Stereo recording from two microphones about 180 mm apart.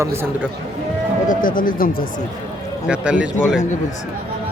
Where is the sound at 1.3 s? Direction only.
50° left (ahead or behind).